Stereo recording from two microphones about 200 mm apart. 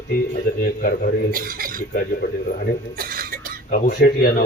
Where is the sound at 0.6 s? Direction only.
45° left (ahead or behind).